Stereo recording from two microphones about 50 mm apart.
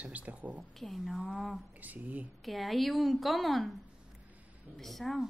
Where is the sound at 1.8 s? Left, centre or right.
Right.